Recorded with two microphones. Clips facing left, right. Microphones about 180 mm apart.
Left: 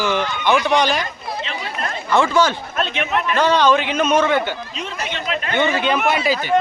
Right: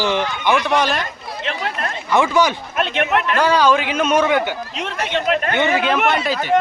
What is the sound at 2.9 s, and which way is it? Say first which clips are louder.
Speech: right 4 dB; 60° right (ahead or behind).